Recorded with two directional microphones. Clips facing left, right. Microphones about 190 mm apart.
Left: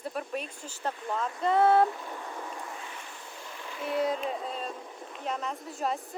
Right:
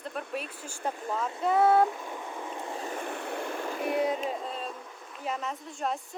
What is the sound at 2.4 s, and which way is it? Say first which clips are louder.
Vehicle: right 3 dB; 25° right (ahead or behind).